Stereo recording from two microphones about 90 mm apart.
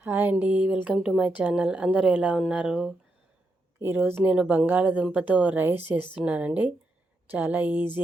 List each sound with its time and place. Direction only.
0.0 s speech: 20° right (ahead or behind)
3.8 s a woman's voice: 25° right (ahead or behind)